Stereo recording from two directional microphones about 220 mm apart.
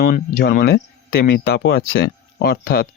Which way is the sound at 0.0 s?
45° left (ahead or behind).